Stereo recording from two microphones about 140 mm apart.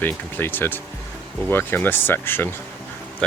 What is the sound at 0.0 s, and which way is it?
Speech, 15° left (ahead or behind).